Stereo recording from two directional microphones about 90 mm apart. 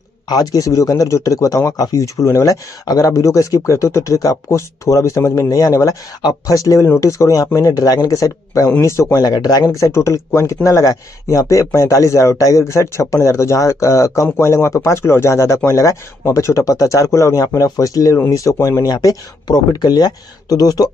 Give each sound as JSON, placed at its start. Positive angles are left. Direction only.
{"t": 0.3, "sound": "speech", "side_deg": 45}